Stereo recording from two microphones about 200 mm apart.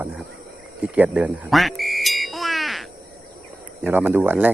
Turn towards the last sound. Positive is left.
turn(degrees=-10)  # may be behind; listen again after turning